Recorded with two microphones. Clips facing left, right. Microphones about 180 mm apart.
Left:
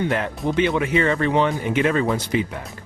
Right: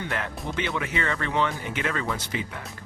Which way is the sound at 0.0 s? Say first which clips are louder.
Left 9 dB; 20° left (ahead or behind).